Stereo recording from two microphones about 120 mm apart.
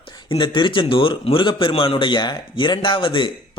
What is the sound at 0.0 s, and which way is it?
A man's voice, 40° left (ahead or behind).